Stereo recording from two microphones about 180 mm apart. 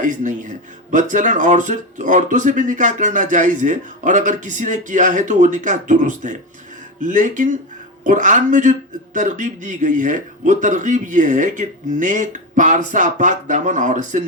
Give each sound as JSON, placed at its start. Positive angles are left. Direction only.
{"t": 0.0, "sound": "speech", "side_deg": -45}